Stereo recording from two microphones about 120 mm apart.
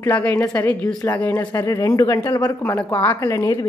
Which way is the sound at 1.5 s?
30° left (ahead or behind).